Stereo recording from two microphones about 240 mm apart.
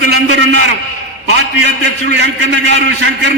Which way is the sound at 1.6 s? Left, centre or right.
Right.